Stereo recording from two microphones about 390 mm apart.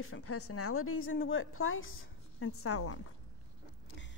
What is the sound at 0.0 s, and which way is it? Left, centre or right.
A woman's voice, left.